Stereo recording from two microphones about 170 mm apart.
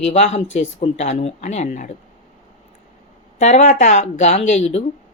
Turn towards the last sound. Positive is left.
turn(degrees=40)  # may be behind; listen again after turning